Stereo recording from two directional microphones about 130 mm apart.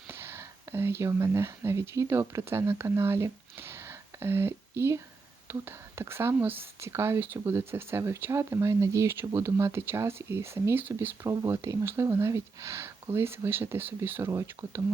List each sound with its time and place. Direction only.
0.1 s speech: 20° right (ahead or behind)